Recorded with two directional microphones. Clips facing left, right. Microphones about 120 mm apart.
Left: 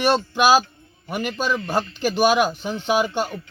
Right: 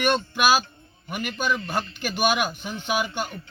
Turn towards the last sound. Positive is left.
turn(degrees=35)  # may be behind; listen again after turning